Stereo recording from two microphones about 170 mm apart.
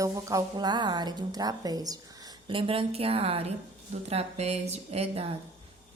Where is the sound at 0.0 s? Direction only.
20° right (ahead or behind).